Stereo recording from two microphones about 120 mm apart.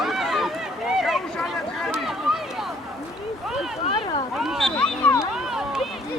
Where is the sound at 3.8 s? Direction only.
45° left (ahead or behind).